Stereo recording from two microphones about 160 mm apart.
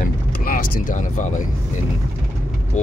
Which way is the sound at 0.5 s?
60° left (ahead or behind).